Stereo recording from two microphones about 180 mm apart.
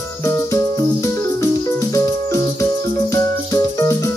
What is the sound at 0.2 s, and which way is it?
Music, 15° left (ahead or behind).